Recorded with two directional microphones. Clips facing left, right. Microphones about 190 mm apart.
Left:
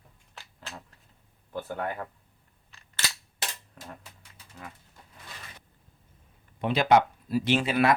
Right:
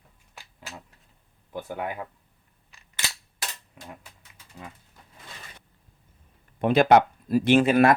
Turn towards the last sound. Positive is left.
turn(degrees=-50)  # may be behind; listen again after turning